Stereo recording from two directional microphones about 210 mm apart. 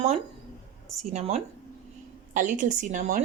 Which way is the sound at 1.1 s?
30° right (ahead or behind).